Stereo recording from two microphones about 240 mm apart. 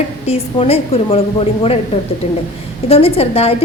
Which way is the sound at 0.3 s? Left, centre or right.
Left.